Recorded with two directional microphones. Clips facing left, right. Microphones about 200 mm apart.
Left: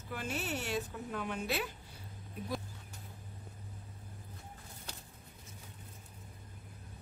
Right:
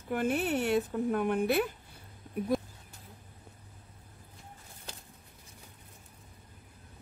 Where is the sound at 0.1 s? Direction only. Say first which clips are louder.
Right 9 dB; 55° right (ahead or behind).